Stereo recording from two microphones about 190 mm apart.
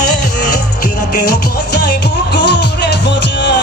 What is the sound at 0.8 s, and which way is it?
Music, 55° left (ahead or behind).